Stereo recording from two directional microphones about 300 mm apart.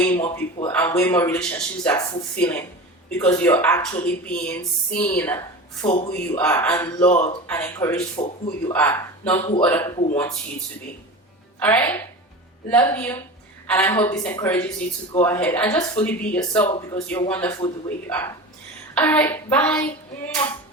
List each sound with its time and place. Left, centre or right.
0.0 s a sound: centre
0.3 s a man's voice: centre
7.1 s speech: left
7.4 s a woman's voice: centre
11.6 s a man's voice: centre